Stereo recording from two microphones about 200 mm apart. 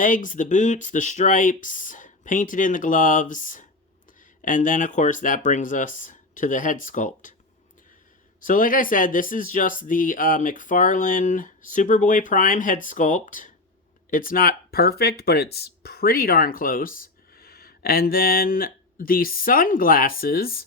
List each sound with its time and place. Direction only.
0.0 s speech: 40° left (ahead or behind)
8.4 s speech: 40° left (ahead or behind)